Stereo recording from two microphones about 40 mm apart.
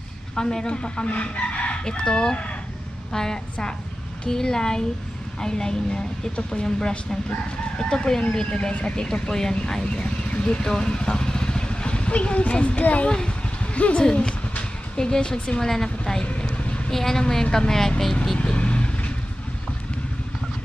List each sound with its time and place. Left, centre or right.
0.4 s speech: centre; by 1.8 s left
1.9 s a woman's voice: centre
8.2 s speech: left
13.3 s a sound: left
15.6 s speech: centre
16.0 s speech: left
16.3 s vehicle: left
16.9 s speech: centre
18.4 s vehicle: left